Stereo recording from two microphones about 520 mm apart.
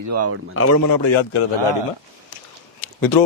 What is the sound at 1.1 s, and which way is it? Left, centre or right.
Speech, left.